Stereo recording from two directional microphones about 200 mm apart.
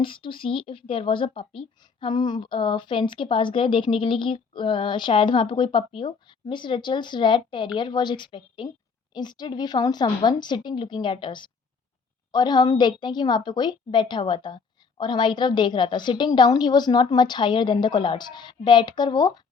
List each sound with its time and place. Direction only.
0.0 s speech: 25° left (ahead or behind)